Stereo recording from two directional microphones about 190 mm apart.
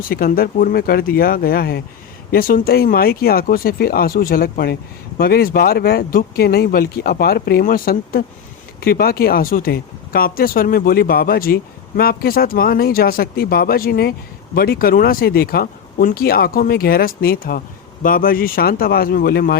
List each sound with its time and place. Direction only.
0.1 s speech: 50° left (ahead or behind)